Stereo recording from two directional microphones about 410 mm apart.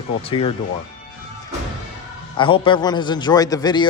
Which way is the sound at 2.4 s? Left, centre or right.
Centre.